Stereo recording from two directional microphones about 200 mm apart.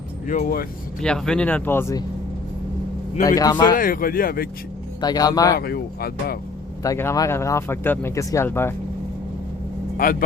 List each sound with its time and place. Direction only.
0.3 s speech: 45° left (ahead or behind)
1.0 s speech: 5° left (ahead or behind)
3.2 s speech: 20° left (ahead or behind)
3.8 s speech: 45° left (ahead or behind)
4.9 s speech: 20° left (ahead or behind)
5.5 s speech: 50° left (ahead or behind)
6.8 s speech: 15° left (ahead or behind)
10.0 s speech: 45° left (ahead or behind)